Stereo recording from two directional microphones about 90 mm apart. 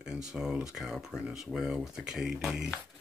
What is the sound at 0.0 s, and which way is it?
Speech, 5° right (ahead or behind).